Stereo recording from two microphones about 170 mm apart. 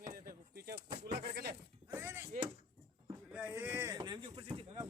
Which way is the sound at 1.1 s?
75° right (ahead or behind).